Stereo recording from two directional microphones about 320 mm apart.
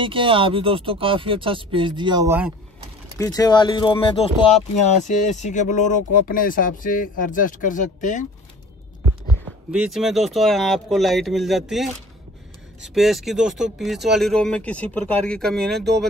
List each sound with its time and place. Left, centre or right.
0.0 s speech: centre
3.2 s speech: centre
9.7 s speech: centre